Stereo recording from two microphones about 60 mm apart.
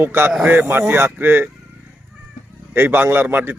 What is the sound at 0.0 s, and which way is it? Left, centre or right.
Speech, right.